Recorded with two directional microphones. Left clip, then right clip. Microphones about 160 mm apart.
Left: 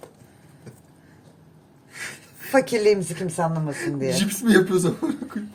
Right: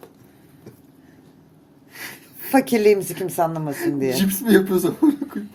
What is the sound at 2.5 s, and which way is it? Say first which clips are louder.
Speech: right 2 dB; 25° right (ahead or behind).